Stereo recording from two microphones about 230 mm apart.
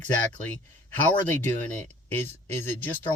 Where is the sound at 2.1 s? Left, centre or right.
Centre.